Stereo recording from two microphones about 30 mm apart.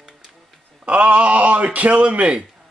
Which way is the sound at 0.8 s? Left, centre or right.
Right.